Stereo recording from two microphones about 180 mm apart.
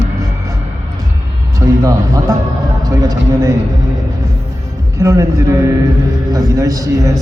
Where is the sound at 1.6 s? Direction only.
20° right (ahead or behind).